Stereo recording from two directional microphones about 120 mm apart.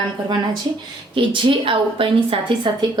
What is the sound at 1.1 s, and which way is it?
A woman's voice, 45° right (ahead or behind).